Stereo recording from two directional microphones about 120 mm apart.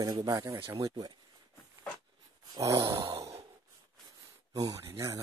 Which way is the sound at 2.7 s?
45° right (ahead or behind).